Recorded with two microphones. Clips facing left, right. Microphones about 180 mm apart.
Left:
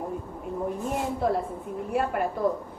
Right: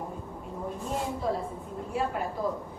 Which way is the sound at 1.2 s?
65° left (ahead or behind).